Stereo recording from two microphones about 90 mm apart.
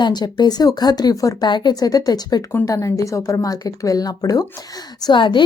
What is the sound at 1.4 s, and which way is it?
A woman's voice, 55° left (ahead or behind).